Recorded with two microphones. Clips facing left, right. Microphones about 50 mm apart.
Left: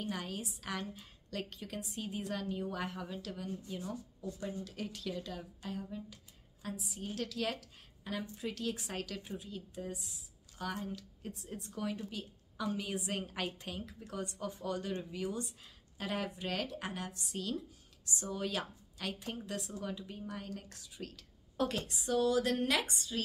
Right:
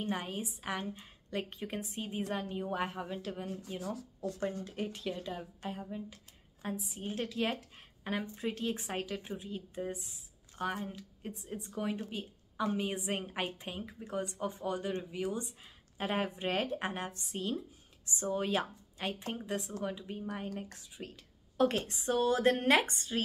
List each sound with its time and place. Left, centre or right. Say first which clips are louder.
0.0 s a woman's voice: right 3 dB; right
3.8 s speech: right 4 dB; right
4.4 s a woman's voice: right 5 dB; right
4.6 s a woman's voice: right 3 dB; right
8.0 s a woman's voice: right 4 dB; right
21.5 s speech: right 5 dB; right